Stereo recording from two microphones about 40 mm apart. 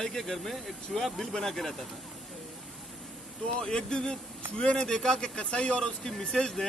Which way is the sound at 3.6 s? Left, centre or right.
Left.